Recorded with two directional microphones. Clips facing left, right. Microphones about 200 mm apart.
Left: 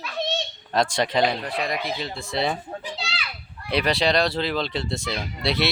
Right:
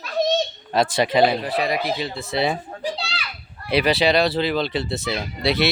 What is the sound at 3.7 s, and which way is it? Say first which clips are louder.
Speech: right 3 dB; 5° right (ahead or behind).